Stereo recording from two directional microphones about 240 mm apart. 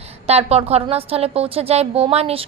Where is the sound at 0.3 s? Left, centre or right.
Right.